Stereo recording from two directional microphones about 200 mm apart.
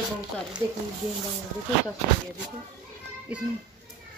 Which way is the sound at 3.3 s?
5° right (ahead or behind).